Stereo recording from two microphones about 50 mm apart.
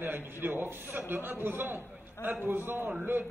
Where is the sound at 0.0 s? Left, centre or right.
Right.